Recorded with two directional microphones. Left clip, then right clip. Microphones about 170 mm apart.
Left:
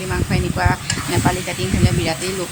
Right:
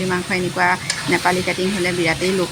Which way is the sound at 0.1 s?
15° right (ahead or behind).